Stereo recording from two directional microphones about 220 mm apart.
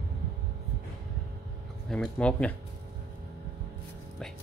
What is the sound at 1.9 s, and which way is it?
Speech, 5° left (ahead or behind).